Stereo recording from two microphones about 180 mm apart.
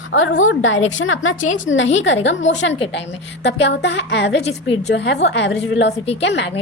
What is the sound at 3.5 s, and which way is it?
A woman's voice, 75° left (ahead or behind).